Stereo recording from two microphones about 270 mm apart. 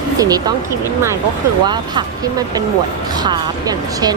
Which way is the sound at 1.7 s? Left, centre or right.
Centre.